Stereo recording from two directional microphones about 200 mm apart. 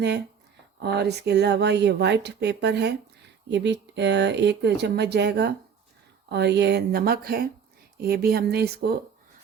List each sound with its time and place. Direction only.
0.8 s speech: 55° right (ahead or behind)